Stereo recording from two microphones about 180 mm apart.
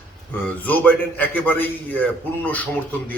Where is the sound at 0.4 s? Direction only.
10° left (ahead or behind).